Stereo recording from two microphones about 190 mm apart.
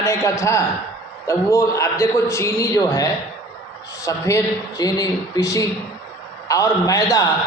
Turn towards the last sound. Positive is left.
turn(degrees=15)  # may be behind; listen again after turning